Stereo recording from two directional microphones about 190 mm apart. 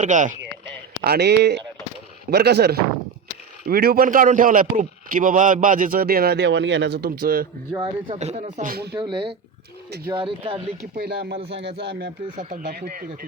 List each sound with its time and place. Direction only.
0.0 s speech: 40° right (ahead or behind)
1.0 s a man's voice: 55° right (ahead or behind)
7.7 s speech: 20° right (ahead or behind); by 9.0 s 55° right (ahead or behind)
9.0 s speech: 25° right (ahead or behind)
11.0 s speech: 60° right (ahead or behind)
12.4 s a man's voice: 45° right (ahead or behind)